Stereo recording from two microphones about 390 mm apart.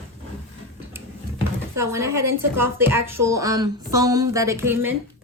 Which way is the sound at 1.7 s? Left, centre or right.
Centre.